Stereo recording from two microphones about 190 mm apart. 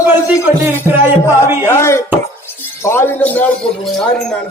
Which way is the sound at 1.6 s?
15° left (ahead or behind).